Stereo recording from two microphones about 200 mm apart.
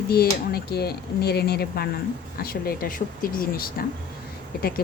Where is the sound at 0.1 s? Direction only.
50° left (ahead or behind).